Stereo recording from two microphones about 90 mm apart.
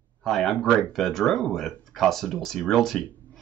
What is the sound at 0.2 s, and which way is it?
Speech, 5° left (ahead or behind).